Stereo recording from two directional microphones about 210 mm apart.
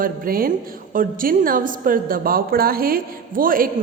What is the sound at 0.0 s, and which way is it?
A woman's voice, 45° right (ahead or behind).